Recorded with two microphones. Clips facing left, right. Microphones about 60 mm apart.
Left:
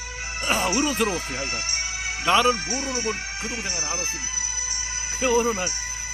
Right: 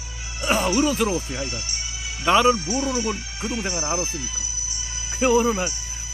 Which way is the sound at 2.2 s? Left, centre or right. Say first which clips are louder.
Right 2 dB; centre.